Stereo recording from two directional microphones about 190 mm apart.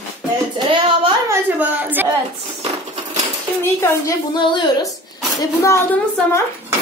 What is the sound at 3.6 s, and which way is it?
A woman's voice, 15° left (ahead or behind).